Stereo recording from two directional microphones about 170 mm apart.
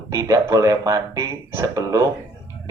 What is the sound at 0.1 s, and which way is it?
Speech, 20° right (ahead or behind).